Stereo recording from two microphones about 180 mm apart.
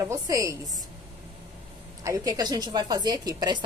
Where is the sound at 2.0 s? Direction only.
20° right (ahead or behind).